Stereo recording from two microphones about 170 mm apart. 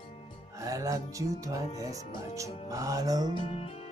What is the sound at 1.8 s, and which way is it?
Music, 20° right (ahead or behind).